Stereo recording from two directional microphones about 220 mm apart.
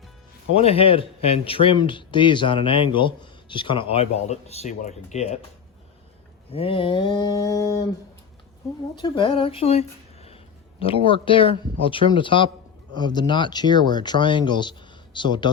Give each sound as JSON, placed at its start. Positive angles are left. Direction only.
{"t": 0.5, "sound": "speech", "side_deg": 25}
{"t": 6.5, "sound": "speech", "side_deg": 25}
{"t": 9.0, "sound": "speech", "side_deg": 20}